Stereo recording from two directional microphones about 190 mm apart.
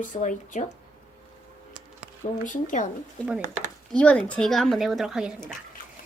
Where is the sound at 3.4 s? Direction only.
40° right (ahead or behind).